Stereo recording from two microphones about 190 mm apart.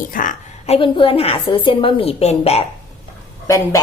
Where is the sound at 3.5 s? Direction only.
15° left (ahead or behind).